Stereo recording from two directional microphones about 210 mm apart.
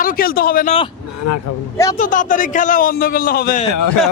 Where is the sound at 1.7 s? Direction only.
15° left (ahead or behind).